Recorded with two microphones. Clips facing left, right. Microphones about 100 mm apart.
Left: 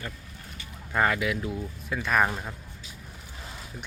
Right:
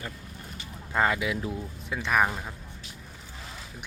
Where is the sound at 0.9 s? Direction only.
20° right (ahead or behind).